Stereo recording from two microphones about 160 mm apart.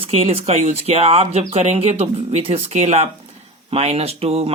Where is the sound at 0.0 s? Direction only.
40° right (ahead or behind).